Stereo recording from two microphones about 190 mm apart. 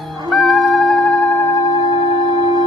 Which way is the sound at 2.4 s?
25° right (ahead or behind).